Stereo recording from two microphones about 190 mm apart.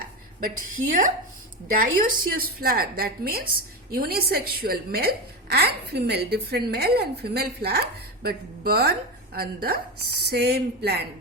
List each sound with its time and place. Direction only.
0.9 s a woman's voice: 45° right (ahead or behind)